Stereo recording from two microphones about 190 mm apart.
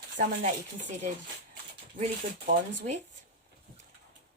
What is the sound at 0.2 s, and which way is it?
Speech, 40° right (ahead or behind).